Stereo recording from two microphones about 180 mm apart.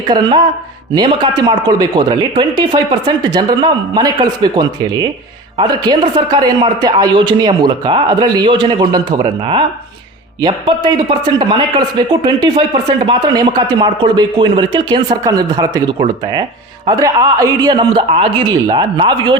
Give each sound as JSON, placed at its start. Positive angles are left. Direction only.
{"t": 0.1, "sound": "speech", "side_deg": -25}